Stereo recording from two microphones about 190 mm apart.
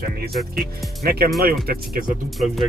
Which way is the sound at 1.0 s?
55° right (ahead or behind).